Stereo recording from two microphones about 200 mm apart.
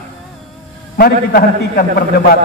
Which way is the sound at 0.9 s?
50° left (ahead or behind).